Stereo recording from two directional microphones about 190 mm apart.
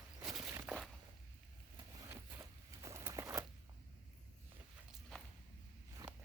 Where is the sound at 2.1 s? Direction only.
15° right (ahead or behind).